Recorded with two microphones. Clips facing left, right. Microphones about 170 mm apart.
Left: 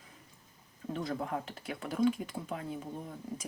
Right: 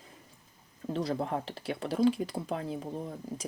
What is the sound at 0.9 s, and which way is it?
Speech, 30° right (ahead or behind).